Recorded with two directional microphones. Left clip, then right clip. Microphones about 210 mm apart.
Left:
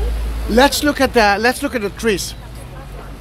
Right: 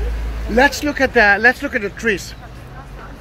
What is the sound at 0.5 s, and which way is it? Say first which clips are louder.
Speech: left 2 dB; 20° left (ahead or behind).